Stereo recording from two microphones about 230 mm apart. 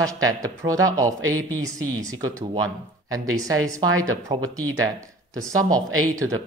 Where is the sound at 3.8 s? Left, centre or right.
Right.